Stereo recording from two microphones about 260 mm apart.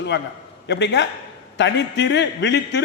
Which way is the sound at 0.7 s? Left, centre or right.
Left.